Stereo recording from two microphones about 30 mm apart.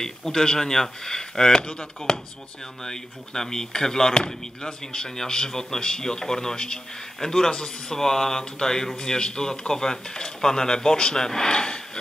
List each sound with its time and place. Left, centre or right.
0.0 s speech: centre
2.8 s speech: centre